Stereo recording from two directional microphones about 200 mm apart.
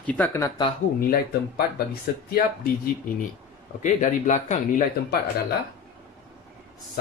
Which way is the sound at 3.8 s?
40° left (ahead or behind).